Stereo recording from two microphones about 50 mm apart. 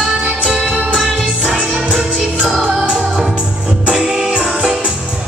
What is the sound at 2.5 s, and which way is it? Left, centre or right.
Music, right.